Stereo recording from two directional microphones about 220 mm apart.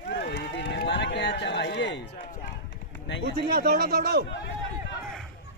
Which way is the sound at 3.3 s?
45° right (ahead or behind).